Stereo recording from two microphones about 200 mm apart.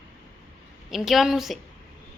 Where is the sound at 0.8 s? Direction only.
Centre (ahead or behind).